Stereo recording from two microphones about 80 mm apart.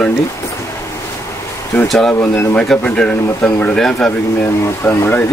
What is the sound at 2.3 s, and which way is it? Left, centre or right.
Speech, left.